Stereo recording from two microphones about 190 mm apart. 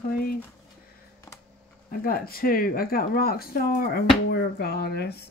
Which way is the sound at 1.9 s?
50° left (ahead or behind).